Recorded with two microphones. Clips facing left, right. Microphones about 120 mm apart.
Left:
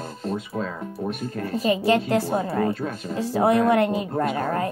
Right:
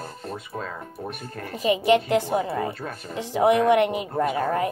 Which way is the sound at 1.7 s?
20° right (ahead or behind).